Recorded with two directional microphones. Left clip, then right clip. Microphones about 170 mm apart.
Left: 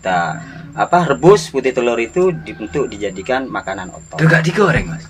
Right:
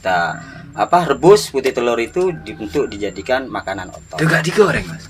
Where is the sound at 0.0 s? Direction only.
35° right (ahead or behind).